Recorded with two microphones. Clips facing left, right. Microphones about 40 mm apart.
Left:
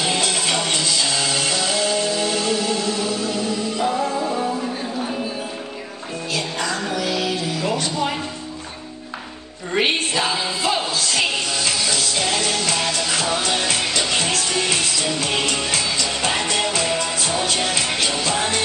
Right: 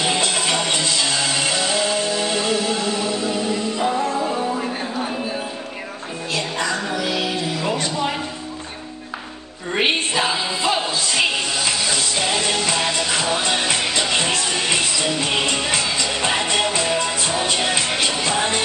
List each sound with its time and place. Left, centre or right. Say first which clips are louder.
0.0 s music: right 1 dB; centre
3.8 s music: even; centre
6.3 s music: right 2 dB; centre
9.7 s music: even; centre